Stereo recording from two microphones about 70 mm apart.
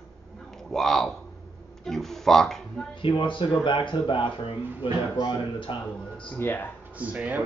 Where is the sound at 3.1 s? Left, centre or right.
Left.